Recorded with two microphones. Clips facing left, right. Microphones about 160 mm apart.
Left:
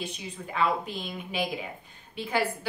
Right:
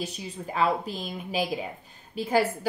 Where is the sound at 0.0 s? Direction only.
40° right (ahead or behind).